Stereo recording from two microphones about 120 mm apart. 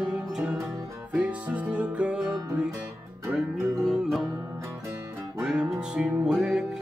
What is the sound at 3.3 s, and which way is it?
Music, 5° right (ahead or behind).